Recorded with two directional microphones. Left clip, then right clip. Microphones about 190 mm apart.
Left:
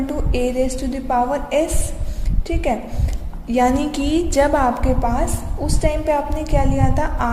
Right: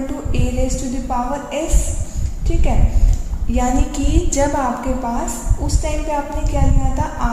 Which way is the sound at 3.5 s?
50° left (ahead or behind).